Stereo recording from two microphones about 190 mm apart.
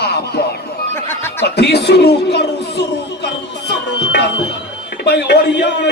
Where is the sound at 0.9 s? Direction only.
10° left (ahead or behind).